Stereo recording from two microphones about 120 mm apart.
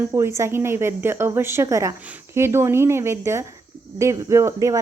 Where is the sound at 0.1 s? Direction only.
20° right (ahead or behind).